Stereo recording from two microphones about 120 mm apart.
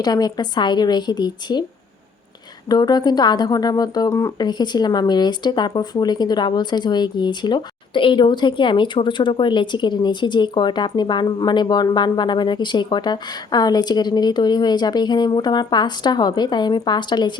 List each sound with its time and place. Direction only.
0.0 s speech: 35° left (ahead or behind)
2.6 s speech: 35° left (ahead or behind)